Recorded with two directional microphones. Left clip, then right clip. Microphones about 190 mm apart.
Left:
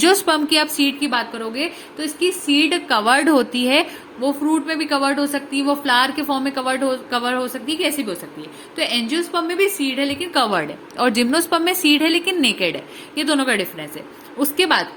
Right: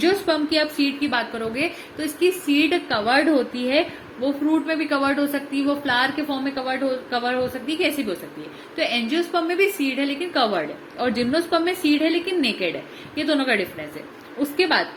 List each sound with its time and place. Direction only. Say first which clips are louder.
0.0 s a woman's voice: left 5 dB; 45° left (ahead or behind)
0.5 s a woman's voice: left 4 dB; 25° left (ahead or behind)
3.1 s a woman's voice: left 3 dB; 35° left (ahead or behind)
4.4 s a woman's voice: even; 15° left (ahead or behind)
5.8 s a woman's voice: left 5 dB; 25° left (ahead or behind)
7.7 s a woman's voice: left 4 dB; 15° left (ahead or behind)
10.9 s a woman's voice: left 5 dB; 40° left (ahead or behind)